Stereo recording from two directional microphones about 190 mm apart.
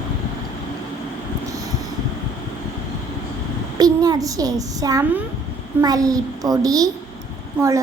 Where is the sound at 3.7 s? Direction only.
20° right (ahead or behind).